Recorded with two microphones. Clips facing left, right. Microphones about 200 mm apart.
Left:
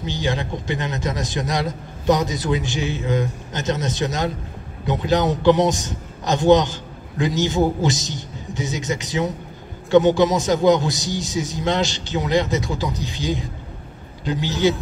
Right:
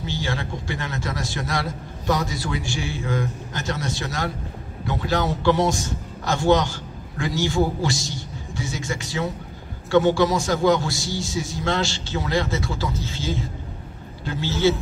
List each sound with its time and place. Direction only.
0.0 s a man's voice: 20° left (ahead or behind)